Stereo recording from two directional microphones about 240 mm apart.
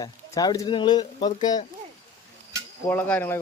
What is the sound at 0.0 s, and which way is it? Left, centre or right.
Speech, centre.